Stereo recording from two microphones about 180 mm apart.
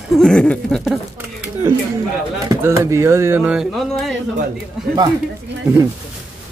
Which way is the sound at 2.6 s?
15° right (ahead or behind).